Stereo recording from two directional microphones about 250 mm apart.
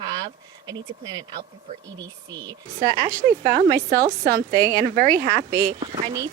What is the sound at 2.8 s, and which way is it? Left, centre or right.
A woman's voice, right.